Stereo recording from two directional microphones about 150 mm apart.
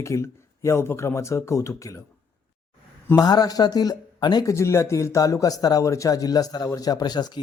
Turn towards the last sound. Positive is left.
turn(degrees=30)  # may be behind; listen again after turning